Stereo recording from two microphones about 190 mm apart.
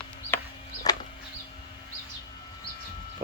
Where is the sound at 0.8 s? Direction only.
20° left (ahead or behind).